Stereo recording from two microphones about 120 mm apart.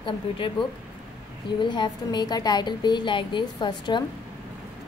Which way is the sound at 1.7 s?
40° left (ahead or behind).